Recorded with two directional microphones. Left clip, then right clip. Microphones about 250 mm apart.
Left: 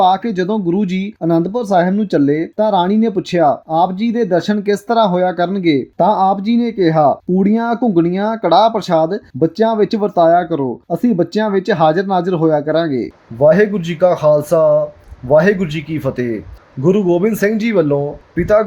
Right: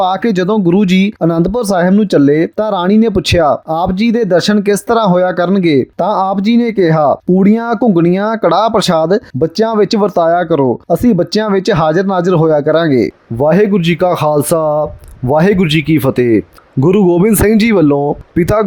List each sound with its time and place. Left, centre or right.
0.0 s speech: right